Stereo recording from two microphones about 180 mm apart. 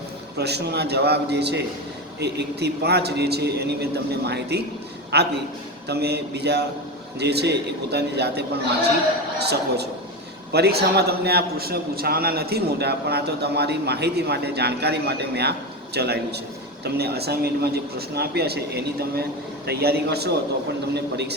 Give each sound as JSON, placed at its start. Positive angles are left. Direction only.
{"t": 0.3, "sound": "a man's voice", "side_deg": -65}